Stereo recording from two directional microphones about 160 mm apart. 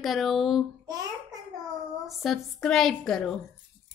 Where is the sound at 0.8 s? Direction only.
25° right (ahead or behind).